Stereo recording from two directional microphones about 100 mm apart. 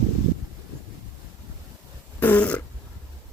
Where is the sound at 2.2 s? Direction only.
15° left (ahead or behind).